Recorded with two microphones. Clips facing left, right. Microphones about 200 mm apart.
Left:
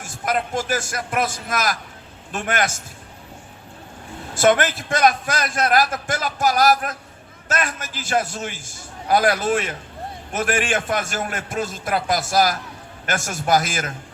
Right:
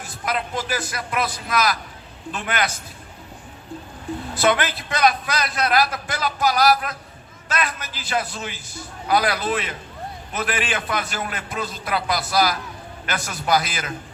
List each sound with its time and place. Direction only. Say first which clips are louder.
0.0 s a man's voice: left 3 dB; 45° left (ahead or behind)
4.4 s a man's voice: left 4 dB; 45° left (ahead or behind)